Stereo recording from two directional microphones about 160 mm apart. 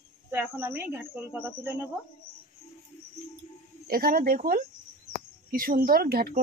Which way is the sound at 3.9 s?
65° right (ahead or behind).